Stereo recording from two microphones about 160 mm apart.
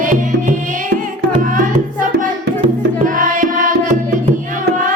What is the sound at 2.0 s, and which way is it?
Music, 55° right (ahead or behind).